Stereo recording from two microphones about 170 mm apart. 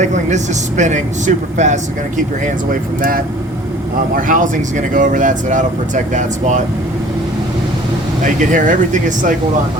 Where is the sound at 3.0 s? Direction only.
55° right (ahead or behind).